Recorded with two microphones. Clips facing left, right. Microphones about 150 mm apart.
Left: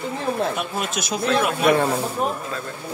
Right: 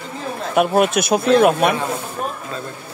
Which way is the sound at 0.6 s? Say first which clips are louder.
Right 11 dB; 60° right (ahead or behind).